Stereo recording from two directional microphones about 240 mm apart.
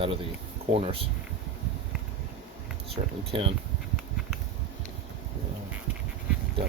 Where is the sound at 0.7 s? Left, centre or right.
Right.